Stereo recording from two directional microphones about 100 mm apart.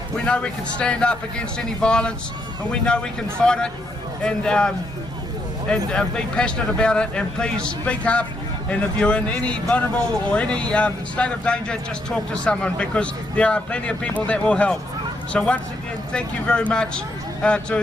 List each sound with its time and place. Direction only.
0.3 s speech: 10° left (ahead or behind)